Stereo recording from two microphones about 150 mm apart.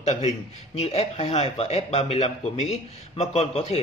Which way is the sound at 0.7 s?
45° left (ahead or behind).